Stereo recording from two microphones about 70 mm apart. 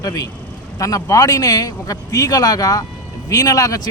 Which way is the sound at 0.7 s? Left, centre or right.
Left.